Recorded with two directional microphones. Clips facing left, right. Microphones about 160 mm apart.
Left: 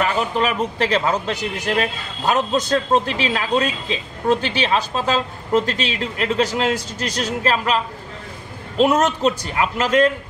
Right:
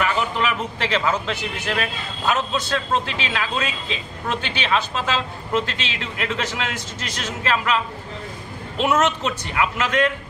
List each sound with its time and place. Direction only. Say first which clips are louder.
0.0 s a man's voice: left 2 dB; 40° left (ahead or behind)